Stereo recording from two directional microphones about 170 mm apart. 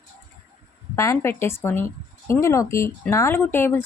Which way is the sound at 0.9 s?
15° left (ahead or behind).